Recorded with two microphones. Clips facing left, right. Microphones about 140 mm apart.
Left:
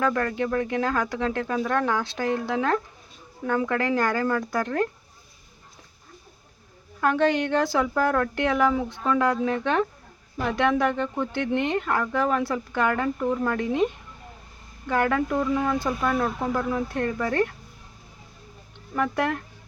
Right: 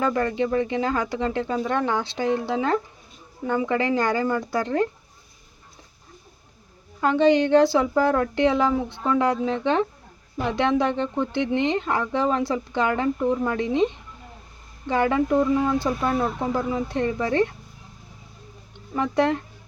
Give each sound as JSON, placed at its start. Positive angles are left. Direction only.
{"t": 0.0, "sound": "a woman's voice", "side_deg": -15}
{"t": 7.0, "sound": "a woman's voice", "side_deg": -20}
{"t": 16.1, "sound": "speech", "side_deg": 0}
{"t": 16.7, "sound": "a woman's voice", "side_deg": -20}
{"t": 18.9, "sound": "speech", "side_deg": -20}